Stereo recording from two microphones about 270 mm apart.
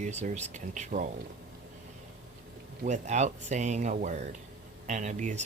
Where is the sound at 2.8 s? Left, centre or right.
Right.